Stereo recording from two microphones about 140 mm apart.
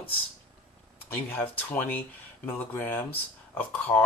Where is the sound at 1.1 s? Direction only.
15° left (ahead or behind).